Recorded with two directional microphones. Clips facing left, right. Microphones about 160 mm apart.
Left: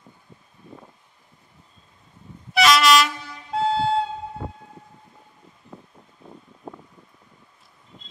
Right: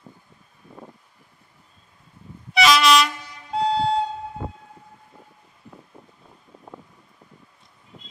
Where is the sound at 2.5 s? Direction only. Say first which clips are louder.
Even; centre (ahead or behind).